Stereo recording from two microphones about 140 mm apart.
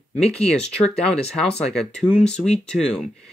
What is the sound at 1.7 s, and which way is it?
Speech, 5° left (ahead or behind).